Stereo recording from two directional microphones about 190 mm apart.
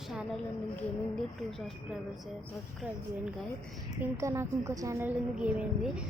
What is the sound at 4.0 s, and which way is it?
A woman's voice, 15° right (ahead or behind).